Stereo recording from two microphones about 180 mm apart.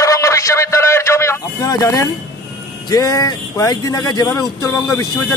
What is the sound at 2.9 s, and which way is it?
Speech, 20° left (ahead or behind).